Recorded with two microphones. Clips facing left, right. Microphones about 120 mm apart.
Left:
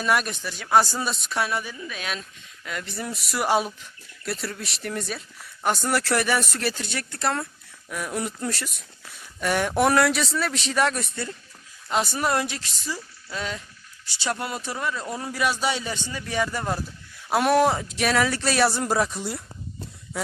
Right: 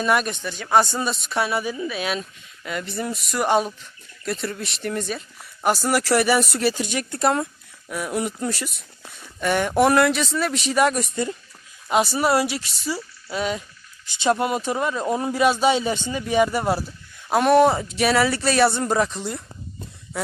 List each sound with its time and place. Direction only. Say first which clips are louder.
0.0 s speech: right 3 dB; centre (ahead or behind); by 7.4 s 20° right (ahead or behind)
7.9 s speech: right 4 dB; 5° right (ahead or behind)
17.2 s speech: right 4 dB; centre (ahead or behind)